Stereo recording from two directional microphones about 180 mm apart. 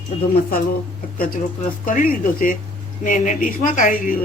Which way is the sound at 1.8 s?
50° left (ahead or behind).